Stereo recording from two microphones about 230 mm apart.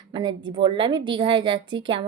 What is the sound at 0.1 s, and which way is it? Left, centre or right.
Speech, centre.